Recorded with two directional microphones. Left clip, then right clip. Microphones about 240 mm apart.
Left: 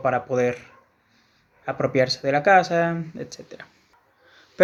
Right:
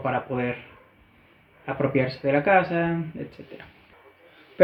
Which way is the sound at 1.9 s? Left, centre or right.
Centre.